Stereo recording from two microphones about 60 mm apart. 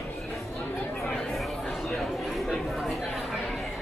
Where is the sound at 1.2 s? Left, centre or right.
Centre.